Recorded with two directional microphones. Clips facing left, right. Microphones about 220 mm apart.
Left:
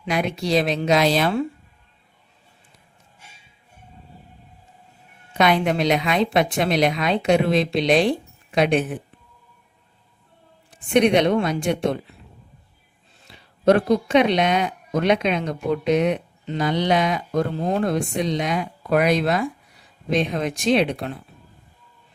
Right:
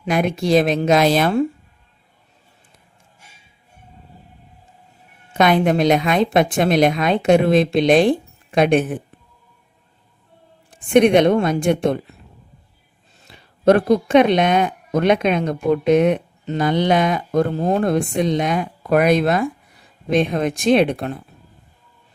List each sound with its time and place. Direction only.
0.0 s speech: 50° right (ahead or behind)
5.4 s speech: 50° right (ahead or behind)
10.7 s speech: 50° right (ahead or behind)
13.2 s speech: 50° right (ahead or behind)